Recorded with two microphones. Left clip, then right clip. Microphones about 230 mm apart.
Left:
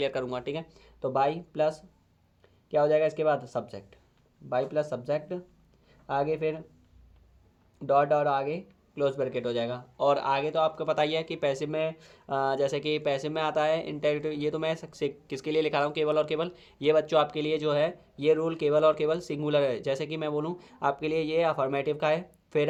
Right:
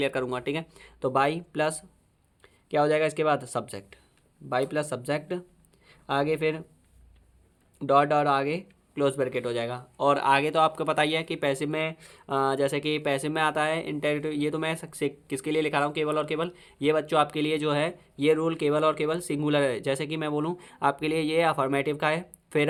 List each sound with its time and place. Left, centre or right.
0.0 s speech: right
7.8 s speech: right